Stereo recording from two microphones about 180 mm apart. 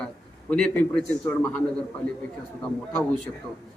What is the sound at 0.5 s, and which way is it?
A man's voice, 5° left (ahead or behind).